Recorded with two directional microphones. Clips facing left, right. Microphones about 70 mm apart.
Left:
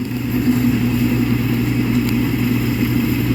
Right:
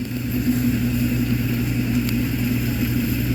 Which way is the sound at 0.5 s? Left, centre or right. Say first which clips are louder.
Left 4 dB; left.